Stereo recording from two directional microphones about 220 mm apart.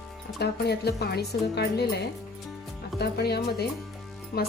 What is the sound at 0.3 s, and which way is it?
A woman's voice, 50° left (ahead or behind).